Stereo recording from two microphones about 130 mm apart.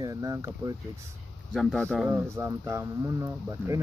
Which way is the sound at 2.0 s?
20° right (ahead or behind).